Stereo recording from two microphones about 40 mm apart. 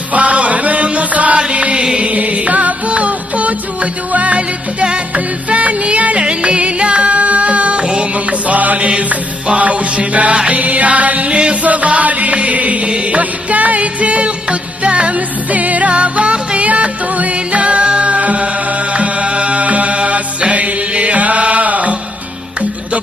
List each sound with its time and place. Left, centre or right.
0.1 s chant: right
2.0 s music: right
13.2 s music: right